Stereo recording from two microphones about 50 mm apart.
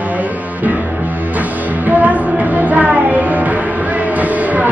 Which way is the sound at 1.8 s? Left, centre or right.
Right.